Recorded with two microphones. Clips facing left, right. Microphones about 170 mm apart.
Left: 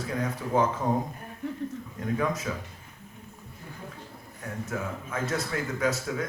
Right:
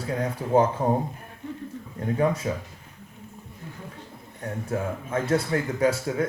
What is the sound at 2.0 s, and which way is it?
Speech, 30° right (ahead or behind).